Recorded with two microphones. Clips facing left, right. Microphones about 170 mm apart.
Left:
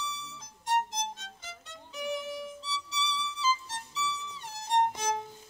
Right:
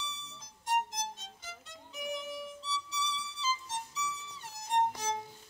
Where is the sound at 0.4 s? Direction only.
75° left (ahead or behind).